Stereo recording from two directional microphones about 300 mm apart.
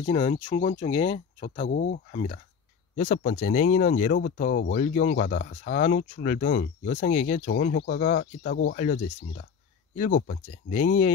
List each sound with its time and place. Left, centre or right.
0.0 s speech: left